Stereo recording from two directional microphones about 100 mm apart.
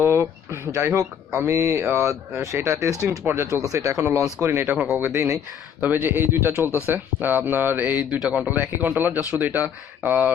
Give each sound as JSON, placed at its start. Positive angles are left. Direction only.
{"t": 0.0, "sound": "speech", "side_deg": -25}
{"t": 4.6, "sound": "speech", "side_deg": -5}
{"t": 4.9, "sound": "speech", "side_deg": -20}